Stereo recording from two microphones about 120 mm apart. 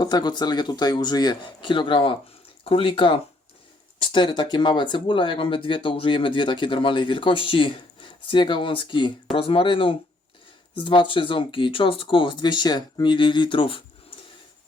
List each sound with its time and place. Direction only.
0.0 s speech: 35° left (ahead or behind)